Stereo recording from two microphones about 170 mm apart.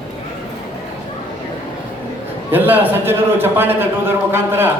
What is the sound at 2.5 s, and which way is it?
A man's voice, 10° right (ahead or behind).